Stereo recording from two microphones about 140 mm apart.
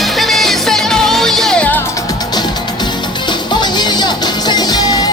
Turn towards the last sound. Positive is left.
turn(degrees=30)  # may be behind; listen again after turning